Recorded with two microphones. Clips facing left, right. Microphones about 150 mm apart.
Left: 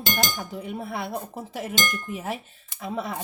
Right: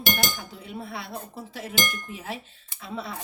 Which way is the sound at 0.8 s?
55° left (ahead or behind).